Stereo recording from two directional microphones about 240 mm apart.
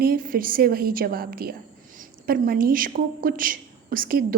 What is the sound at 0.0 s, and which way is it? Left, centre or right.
Speech, right.